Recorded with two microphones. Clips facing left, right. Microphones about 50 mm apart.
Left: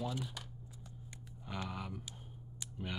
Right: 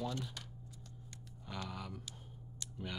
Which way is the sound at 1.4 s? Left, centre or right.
Centre.